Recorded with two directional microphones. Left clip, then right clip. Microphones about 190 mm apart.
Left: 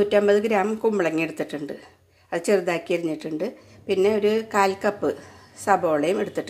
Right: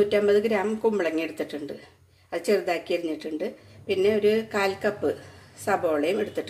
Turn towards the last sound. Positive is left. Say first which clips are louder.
# left 2 dB
turn(degrees=35)  # may be behind; listen again after turning